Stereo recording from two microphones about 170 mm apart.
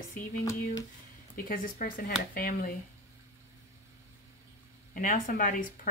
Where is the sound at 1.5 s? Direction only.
55° left (ahead or behind).